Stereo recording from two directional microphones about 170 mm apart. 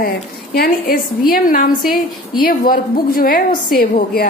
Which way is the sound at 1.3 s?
55° left (ahead or behind).